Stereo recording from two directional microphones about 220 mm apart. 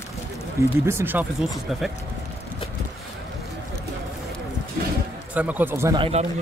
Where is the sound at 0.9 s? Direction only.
10° right (ahead or behind).